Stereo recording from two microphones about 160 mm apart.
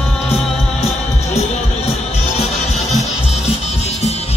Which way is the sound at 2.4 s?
45° left (ahead or behind).